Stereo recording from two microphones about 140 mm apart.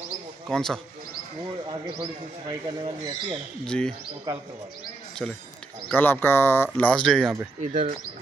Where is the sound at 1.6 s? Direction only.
35° right (ahead or behind).